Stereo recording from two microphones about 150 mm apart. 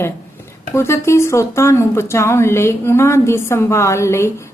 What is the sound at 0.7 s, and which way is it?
Speech, 20° left (ahead or behind).